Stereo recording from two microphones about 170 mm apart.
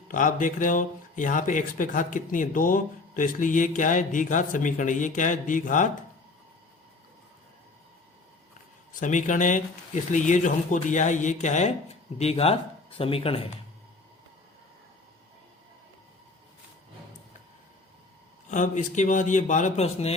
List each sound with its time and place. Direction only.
0.1 s speech: 50° left (ahead or behind)
8.9 s speech: 50° left (ahead or behind)
18.5 s speech: 45° left (ahead or behind)